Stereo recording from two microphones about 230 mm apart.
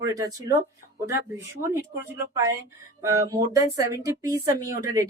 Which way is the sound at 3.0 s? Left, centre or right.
Centre.